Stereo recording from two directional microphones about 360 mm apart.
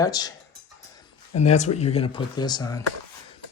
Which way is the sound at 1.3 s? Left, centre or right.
Centre.